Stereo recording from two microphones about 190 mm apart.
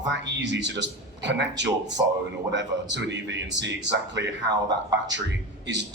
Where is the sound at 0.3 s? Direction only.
65° right (ahead or behind).